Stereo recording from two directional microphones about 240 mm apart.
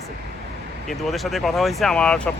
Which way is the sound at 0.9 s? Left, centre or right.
Centre.